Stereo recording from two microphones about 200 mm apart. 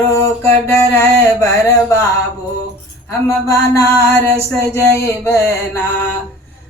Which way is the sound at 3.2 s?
15° left (ahead or behind).